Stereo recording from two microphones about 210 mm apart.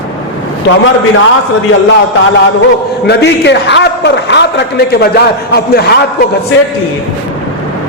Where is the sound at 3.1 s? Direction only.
55° left (ahead or behind).